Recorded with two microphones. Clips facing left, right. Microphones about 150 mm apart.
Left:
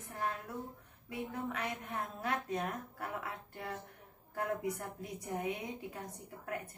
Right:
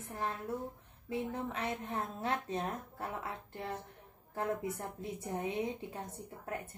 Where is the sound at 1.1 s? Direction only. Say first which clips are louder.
Right 2 dB; 25° right (ahead or behind).